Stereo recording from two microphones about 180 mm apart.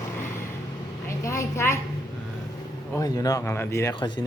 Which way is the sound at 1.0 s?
15° left (ahead or behind).